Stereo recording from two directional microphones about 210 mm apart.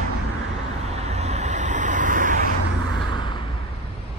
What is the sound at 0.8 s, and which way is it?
Vehicle, 30° right (ahead or behind).